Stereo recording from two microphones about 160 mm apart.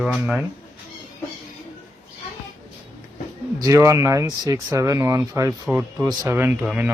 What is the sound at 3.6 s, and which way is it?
Speech, 20° right (ahead or behind).